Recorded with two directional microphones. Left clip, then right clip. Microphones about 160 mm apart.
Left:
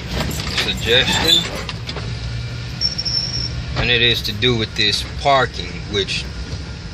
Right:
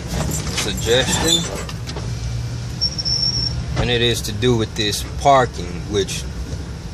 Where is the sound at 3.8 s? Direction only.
20° right (ahead or behind).